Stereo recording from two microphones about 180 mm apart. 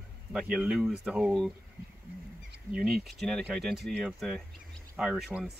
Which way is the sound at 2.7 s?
5° right (ahead or behind).